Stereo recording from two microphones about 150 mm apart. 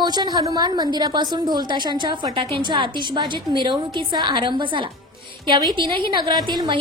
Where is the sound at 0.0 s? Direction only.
30° right (ahead or behind).